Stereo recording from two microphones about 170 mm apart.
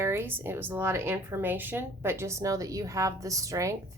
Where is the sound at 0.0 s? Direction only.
15° right (ahead or behind).